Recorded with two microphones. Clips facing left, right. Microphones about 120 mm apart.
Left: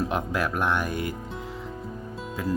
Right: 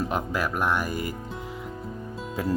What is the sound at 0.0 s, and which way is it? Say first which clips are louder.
Speech: left 1 dB; 5° right (ahead or behind).